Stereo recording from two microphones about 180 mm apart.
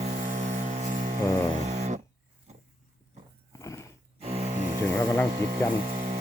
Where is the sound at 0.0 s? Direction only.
45° right (ahead or behind).